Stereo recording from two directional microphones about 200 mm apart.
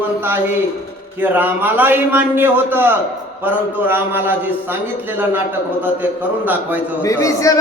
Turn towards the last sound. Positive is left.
turn(degrees=15)  # may be behind; listen again after turning